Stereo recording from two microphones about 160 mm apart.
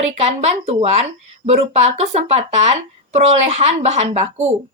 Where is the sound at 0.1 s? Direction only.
45° right (ahead or behind).